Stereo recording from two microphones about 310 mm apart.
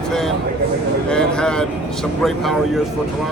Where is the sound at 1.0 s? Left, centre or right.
Centre.